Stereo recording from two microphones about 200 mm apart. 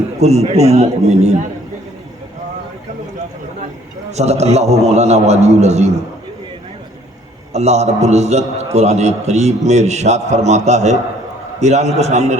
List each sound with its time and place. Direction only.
0.2 s a man's voice: 35° right (ahead or behind)
4.1 s a man's voice: 35° right (ahead or behind)
7.5 s a man's voice: 35° right (ahead or behind)